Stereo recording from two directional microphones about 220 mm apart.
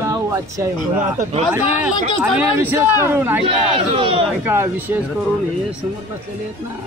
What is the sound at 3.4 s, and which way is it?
Speech, 25° right (ahead or behind).